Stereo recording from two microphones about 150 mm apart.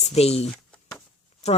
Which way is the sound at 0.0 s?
45° left (ahead or behind).